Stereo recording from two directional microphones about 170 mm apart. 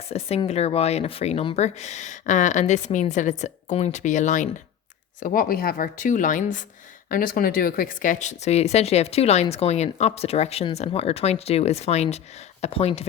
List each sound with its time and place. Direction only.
0.1 s speech: 35° left (ahead or behind)